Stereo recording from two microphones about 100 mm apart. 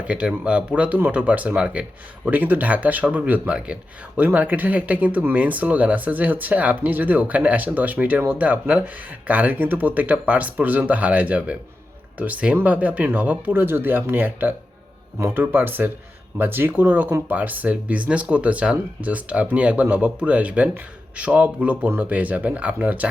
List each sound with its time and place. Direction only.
0.0 s speech: 10° right (ahead or behind)